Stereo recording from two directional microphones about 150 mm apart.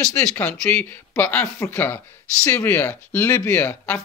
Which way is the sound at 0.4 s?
10° left (ahead or behind).